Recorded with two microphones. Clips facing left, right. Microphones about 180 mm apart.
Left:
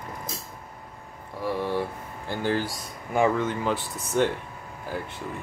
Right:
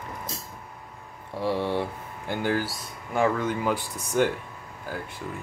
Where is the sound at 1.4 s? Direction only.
25° right (ahead or behind).